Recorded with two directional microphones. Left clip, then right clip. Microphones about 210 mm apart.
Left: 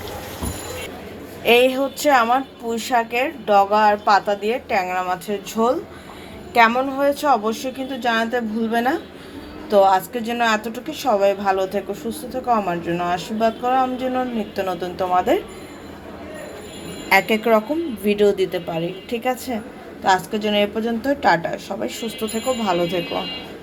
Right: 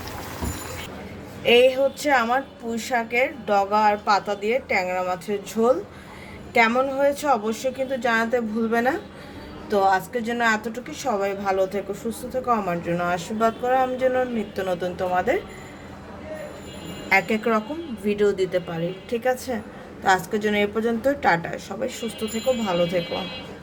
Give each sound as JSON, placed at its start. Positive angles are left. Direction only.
{"t": 1.5, "sound": "a woman's voice", "side_deg": 5}
{"t": 17.1, "sound": "a woman's voice", "side_deg": 5}